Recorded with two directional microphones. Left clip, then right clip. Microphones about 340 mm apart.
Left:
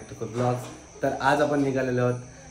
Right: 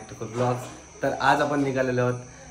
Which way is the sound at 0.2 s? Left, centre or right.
Centre.